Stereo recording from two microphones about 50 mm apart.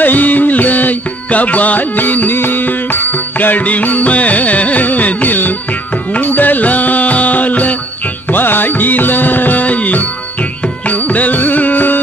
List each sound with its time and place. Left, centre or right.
0.0 s music: left
8.3 s music: left